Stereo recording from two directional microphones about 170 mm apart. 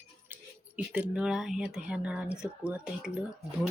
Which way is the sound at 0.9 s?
5° right (ahead or behind).